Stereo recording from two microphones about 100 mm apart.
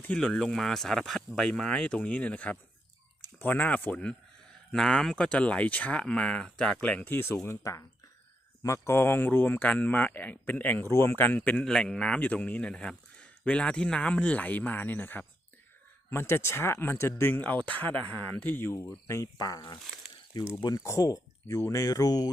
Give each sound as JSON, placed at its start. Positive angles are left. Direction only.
{"t": 0.0, "sound": "speech", "side_deg": 10}
{"t": 7.1, "sound": "a man's voice", "side_deg": 25}
{"t": 11.6, "sound": "a man's voice", "side_deg": 5}
{"t": 19.4, "sound": "speech", "side_deg": 40}
{"t": 20.8, "sound": "speech", "side_deg": 30}